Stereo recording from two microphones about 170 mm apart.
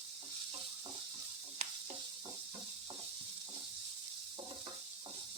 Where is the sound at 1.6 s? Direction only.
40° right (ahead or behind).